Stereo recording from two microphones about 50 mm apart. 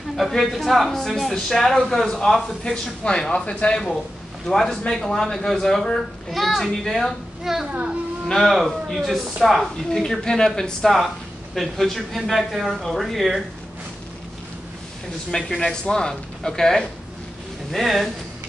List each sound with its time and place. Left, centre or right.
0.1 s speech: centre
2.7 s speech: centre
7.5 s speech: centre
10.0 s speech: centre
11.5 s speech: centre
15.3 s speech: centre
17.6 s speech: centre